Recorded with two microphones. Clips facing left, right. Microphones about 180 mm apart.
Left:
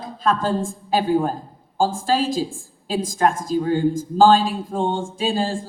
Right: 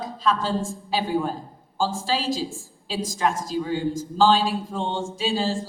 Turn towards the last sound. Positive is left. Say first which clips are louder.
# left 2 dB
turn(degrees=50)  # may be behind; listen again after turning